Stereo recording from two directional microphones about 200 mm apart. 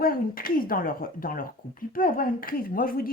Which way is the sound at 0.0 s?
45° left (ahead or behind).